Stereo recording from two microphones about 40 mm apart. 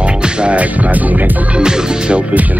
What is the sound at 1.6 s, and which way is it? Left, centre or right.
Speech, centre.